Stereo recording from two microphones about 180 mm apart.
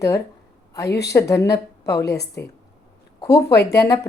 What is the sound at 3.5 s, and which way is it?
Speech, 65° left (ahead or behind).